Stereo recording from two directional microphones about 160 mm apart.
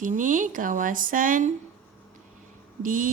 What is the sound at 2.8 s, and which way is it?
Speech, 55° right (ahead or behind).